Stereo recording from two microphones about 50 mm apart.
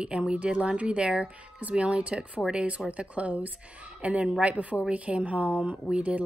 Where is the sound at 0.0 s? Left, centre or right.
Centre.